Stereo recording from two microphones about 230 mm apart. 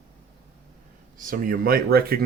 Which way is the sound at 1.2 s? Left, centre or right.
Right.